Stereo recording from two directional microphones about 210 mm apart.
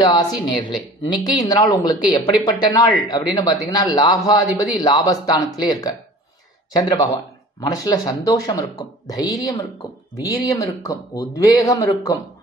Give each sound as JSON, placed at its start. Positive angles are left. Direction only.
{"t": 0.0, "sound": "speech", "side_deg": 20}